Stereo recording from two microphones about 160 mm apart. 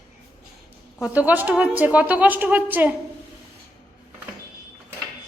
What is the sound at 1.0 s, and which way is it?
A woman's voice, 10° right (ahead or behind).